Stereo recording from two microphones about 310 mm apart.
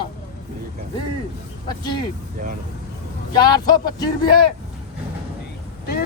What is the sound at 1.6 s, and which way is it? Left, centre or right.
Speech, centre.